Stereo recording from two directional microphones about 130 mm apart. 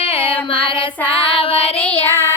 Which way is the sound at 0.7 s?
45° left (ahead or behind).